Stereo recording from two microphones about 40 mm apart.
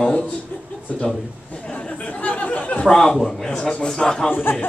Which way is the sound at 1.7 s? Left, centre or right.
Left.